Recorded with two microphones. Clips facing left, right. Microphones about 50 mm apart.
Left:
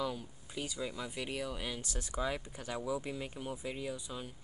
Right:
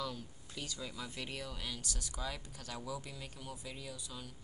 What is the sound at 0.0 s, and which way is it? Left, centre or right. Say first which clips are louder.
Speech: left 4 dB; centre.